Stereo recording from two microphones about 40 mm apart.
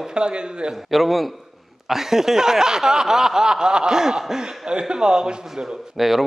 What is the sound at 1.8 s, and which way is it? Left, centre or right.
Snicker, centre.